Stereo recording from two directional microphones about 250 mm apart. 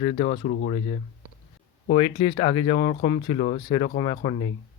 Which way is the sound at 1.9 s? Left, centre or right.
Left.